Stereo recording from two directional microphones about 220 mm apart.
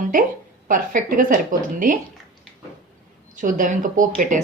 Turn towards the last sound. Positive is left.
turn(degrees=-35)  # may be behind; listen again after turning